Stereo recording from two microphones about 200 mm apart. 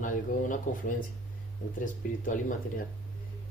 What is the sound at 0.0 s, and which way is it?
Speech, 40° left (ahead or behind).